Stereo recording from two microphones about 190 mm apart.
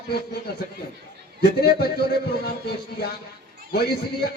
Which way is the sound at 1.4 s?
60° left (ahead or behind).